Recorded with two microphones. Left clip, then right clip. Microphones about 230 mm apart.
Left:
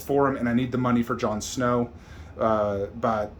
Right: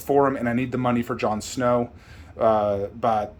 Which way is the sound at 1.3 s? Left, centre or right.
Right.